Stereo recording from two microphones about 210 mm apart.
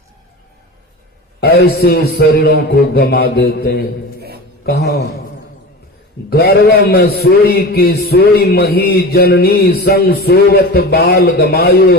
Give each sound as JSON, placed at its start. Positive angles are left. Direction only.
{"t": 1.4, "sound": "a man's voice", "side_deg": 50}
{"t": 6.3, "sound": "a man's voice", "side_deg": 45}